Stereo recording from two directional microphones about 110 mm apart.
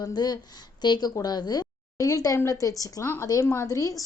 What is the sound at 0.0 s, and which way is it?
A woman's voice, 40° left (ahead or behind).